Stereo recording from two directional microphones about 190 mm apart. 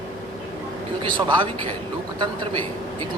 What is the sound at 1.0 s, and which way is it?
Speech, 25° right (ahead or behind).